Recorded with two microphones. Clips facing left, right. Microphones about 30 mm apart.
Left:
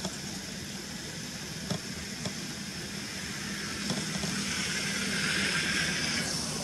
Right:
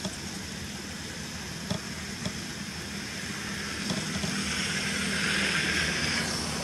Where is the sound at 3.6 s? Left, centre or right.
Centre.